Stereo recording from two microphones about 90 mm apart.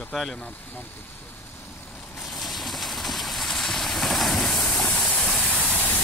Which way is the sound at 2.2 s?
Centre (ahead or behind).